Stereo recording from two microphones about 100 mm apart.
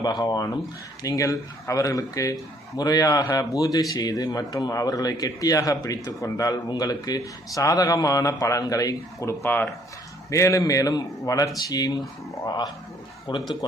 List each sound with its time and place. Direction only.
0.0 s speech: 45° left (ahead or behind)
13.3 s speech: 55° left (ahead or behind)